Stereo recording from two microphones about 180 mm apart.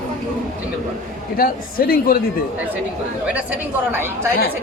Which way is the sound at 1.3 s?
55° left (ahead or behind).